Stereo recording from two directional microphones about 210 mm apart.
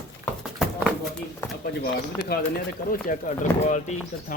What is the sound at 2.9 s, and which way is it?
Speech, 40° left (ahead or behind).